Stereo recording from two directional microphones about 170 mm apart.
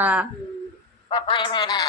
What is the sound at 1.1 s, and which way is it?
Speech, 30° left (ahead or behind).